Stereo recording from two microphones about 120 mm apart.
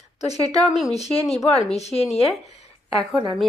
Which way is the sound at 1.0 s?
55° left (ahead or behind).